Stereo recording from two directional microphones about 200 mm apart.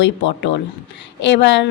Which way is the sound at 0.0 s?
65° left (ahead or behind).